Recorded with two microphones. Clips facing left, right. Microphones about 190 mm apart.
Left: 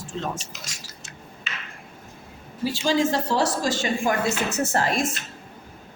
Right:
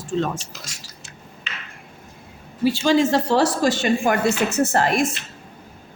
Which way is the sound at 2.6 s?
65° right (ahead or behind).